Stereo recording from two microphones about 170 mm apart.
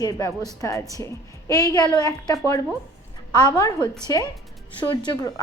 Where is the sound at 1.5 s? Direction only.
20° left (ahead or behind).